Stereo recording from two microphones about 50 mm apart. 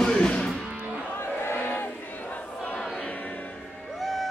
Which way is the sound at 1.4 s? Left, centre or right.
Left.